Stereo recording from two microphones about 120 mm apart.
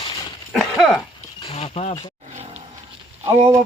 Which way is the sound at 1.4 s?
60° left (ahead or behind).